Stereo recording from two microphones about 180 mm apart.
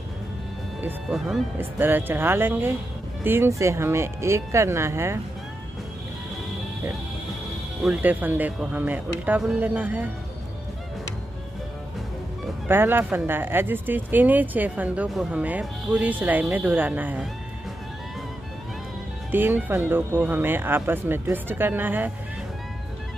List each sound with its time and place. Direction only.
0.8 s speech: centre (ahead or behind)
1.6 s speech: 10° right (ahead or behind)
7.8 s speech: 5° right (ahead or behind)
12.6 s speech: 10° right (ahead or behind)
19.3 s speech: 10° right (ahead or behind)